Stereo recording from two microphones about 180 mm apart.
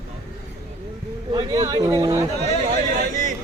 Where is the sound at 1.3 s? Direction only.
20° right (ahead or behind).